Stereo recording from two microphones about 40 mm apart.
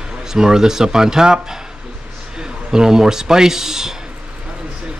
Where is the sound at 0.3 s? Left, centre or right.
Centre.